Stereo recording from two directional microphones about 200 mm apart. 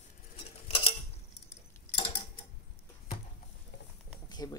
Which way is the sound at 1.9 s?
25° left (ahead or behind).